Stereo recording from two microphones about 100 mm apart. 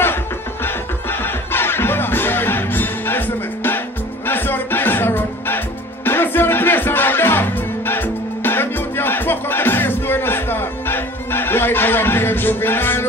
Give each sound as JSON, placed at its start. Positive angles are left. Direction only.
{"t": 1.2, "sound": "music", "side_deg": 20}